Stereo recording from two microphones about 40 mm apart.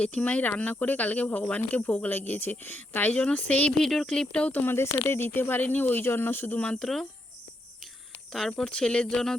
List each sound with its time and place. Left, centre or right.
0.0 s speech: left
3.1 s speech: left
3.8 s speech: centre
4.0 s speech: left
4.6 s speech: left
5.5 s speech: left
8.3 s speech: centre
8.6 s speech: left